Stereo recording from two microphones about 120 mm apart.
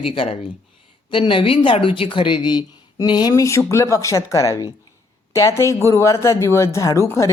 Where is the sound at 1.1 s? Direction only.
45° left (ahead or behind).